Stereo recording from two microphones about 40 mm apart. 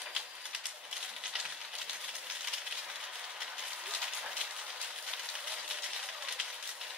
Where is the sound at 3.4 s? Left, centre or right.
Right.